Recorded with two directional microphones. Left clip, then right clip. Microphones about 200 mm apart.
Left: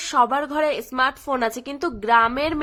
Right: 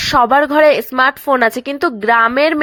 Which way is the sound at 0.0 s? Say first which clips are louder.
Right 8 dB; 30° right (ahead or behind).